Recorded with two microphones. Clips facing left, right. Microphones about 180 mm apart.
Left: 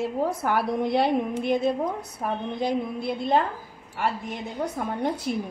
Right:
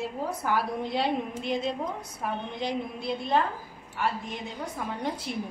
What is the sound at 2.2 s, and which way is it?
Speech, 40° left (ahead or behind).